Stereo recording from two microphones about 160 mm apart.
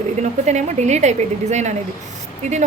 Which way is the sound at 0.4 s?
45° right (ahead or behind).